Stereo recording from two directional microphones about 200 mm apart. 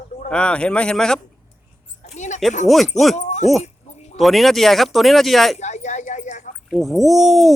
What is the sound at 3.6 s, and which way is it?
Dog, 35° left (ahead or behind).